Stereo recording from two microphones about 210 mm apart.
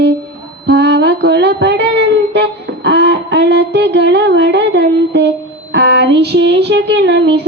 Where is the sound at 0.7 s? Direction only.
55° right (ahead or behind).